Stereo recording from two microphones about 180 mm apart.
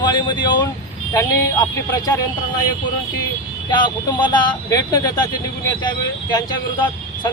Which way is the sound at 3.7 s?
25° left (ahead or behind).